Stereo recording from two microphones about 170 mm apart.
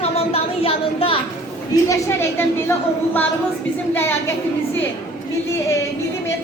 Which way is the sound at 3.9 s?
15° left (ahead or behind).